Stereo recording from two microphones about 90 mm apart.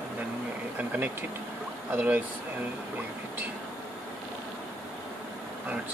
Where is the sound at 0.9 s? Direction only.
20° right (ahead or behind).